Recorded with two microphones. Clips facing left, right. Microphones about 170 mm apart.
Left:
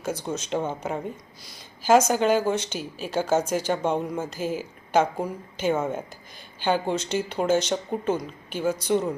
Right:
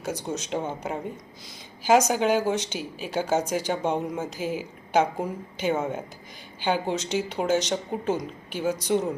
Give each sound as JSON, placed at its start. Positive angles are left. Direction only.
{"t": 0.0, "sound": "speech", "side_deg": -15}
{"t": 1.9, "sound": "speech", "side_deg": -15}